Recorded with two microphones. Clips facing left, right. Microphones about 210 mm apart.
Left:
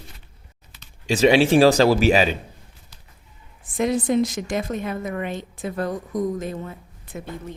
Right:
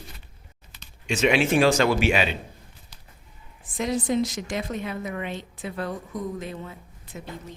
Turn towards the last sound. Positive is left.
turn(degrees=55)  # may be behind; listen again after turning